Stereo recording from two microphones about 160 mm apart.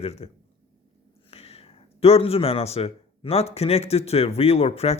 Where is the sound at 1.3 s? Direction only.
40° left (ahead or behind).